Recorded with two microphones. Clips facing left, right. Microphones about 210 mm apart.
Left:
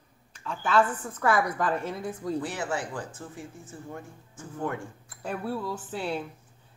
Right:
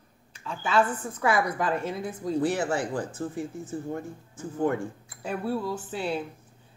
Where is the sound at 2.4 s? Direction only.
40° right (ahead or behind).